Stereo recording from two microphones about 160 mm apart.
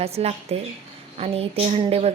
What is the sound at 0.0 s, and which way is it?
Speech, 40° right (ahead or behind).